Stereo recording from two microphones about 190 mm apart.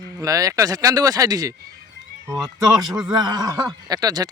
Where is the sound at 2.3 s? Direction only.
Centre (ahead or behind).